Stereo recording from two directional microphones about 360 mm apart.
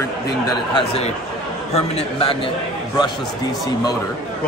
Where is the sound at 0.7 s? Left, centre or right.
Centre.